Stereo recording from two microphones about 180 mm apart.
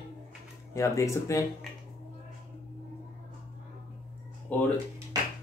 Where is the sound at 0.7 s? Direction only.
15° left (ahead or behind).